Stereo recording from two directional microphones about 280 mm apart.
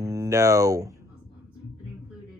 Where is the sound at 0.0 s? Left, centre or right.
Centre.